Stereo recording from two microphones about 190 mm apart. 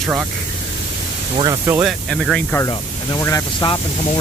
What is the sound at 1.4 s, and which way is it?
Speech, 20° right (ahead or behind).